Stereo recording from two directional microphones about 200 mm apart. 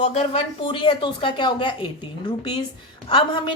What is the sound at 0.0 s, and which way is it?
A woman's voice, 30° left (ahead or behind).